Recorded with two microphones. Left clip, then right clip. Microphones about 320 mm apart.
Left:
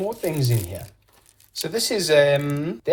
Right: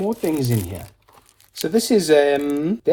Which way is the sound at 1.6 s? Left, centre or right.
Right.